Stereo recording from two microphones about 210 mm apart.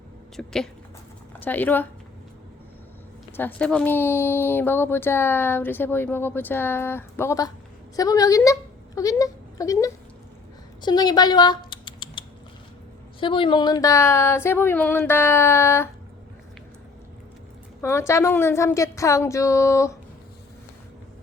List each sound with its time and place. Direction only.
0.3 s speech: centre (ahead or behind)
3.3 s speech: 5° left (ahead or behind)
10.8 s typing: 20° left (ahead or behind)
13.1 s speech: 25° left (ahead or behind)
17.7 s speech: 15° left (ahead or behind)